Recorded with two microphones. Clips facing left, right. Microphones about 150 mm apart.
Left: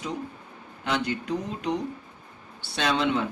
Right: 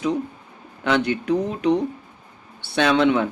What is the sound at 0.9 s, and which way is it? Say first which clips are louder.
Speech: right 7 dB; 65° right (ahead or behind).